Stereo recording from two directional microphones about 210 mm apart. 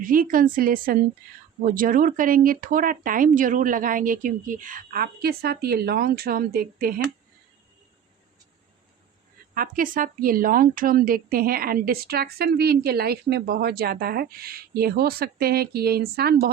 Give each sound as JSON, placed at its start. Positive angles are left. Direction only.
{"t": 0.0, "sound": "speech", "side_deg": -40}
{"t": 9.6, "sound": "a woman's voice", "side_deg": -40}